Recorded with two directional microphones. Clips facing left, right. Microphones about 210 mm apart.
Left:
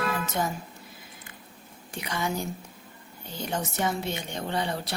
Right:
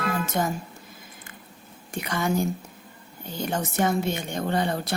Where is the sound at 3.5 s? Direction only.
50° right (ahead or behind).